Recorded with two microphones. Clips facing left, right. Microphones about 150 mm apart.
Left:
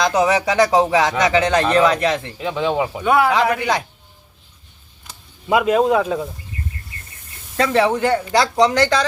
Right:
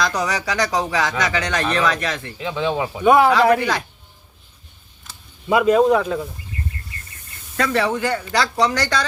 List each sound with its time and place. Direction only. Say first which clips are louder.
0.0 s speech: left 6 dB; 25° left (ahead or behind)
3.0 s a man's voice: right 4 dB; 20° right (ahead or behind)
3.4 s a man's voice: right 4 dB; 35° right (ahead or behind)
5.5 s speech: right 1 dB; 5° left (ahead or behind)
7.5 s speech: left 3 dB; 25° left (ahead or behind)